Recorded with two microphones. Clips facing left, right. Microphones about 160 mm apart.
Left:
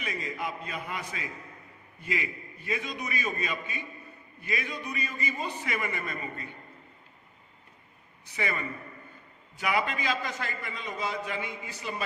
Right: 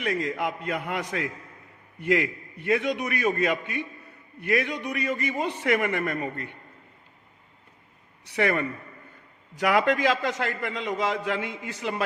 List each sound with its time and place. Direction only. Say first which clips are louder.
0.0 s a man's voice: right 7 dB; 75° right (ahead or behind)
8.2 s a man's voice: right 9 dB; 75° right (ahead or behind)
9.6 s a man's voice: right 7 dB; 85° right